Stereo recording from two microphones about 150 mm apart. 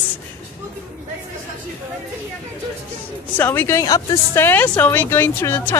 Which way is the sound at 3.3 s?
15° left (ahead or behind).